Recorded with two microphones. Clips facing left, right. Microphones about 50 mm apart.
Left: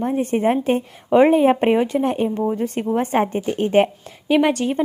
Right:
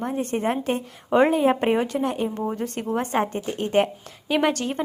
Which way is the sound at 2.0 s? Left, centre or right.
Left.